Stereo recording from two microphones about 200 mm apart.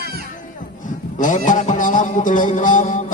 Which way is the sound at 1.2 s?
40° left (ahead or behind).